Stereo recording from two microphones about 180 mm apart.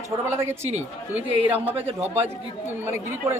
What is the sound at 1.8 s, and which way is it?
Speech, 35° right (ahead or behind).